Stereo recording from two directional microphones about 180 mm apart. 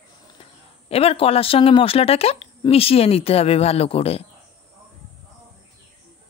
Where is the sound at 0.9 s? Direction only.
35° left (ahead or behind).